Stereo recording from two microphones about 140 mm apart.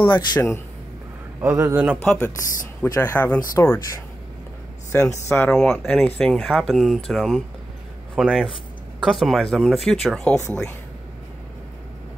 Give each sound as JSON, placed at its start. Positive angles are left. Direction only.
{"t": 0.0, "sound": "a man's voice", "side_deg": 35}
{"t": 1.4, "sound": "a man's voice", "side_deg": -15}
{"t": 2.0, "sound": "speech", "side_deg": 10}
{"t": 5.3, "sound": "speech", "side_deg": 5}